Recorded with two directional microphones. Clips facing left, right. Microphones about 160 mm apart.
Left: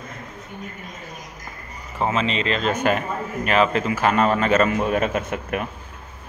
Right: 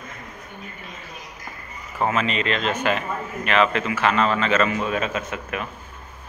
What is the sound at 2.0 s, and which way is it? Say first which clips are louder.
Speech: left 1 dB; 30° left (ahead or behind).